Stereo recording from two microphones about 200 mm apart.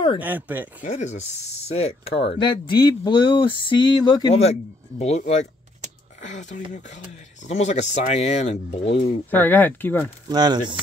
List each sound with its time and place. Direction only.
0.2 s speech: 10° right (ahead or behind)
0.8 s speech: 35° left (ahead or behind)
9.3 s speech: 10° left (ahead or behind)
10.2 s speech: 20° right (ahead or behind)